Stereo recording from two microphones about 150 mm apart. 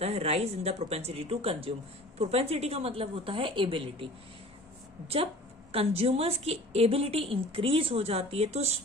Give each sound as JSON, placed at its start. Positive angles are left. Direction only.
{"t": 0.0, "sound": "a woman's voice", "side_deg": -45}